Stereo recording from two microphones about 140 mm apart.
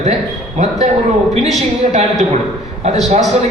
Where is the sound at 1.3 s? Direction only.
50° right (ahead or behind).